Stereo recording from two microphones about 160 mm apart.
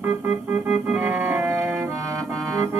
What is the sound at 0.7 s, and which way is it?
Organ, 10° right (ahead or behind).